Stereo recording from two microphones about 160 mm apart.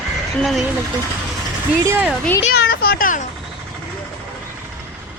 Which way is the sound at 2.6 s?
70° left (ahead or behind).